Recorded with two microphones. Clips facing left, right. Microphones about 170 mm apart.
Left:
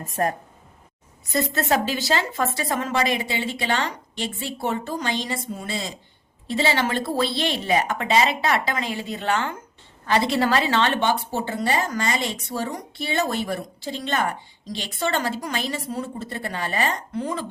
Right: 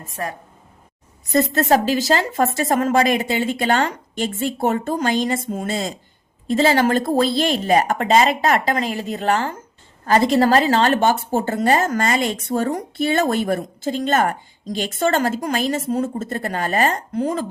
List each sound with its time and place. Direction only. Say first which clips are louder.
0.2 s speech: left 4 dB; 40° left (ahead or behind)
1.5 s a woman's voice: right 5 dB; 40° right (ahead or behind)